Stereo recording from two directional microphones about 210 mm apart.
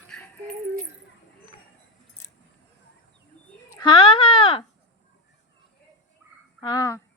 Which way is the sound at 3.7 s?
20° left (ahead or behind).